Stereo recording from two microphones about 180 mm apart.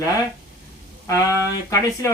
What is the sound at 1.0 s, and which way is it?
Speech, 20° left (ahead or behind).